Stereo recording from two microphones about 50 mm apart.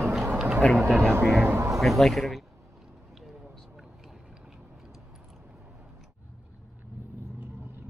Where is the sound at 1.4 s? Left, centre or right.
Right.